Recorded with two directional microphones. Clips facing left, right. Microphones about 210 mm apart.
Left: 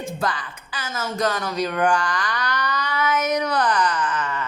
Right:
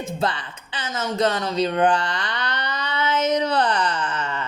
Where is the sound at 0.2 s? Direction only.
25° right (ahead or behind).